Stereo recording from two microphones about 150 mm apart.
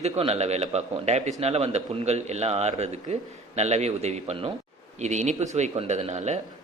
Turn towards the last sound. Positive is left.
turn(degrees=-50)  # may be behind; listen again after turning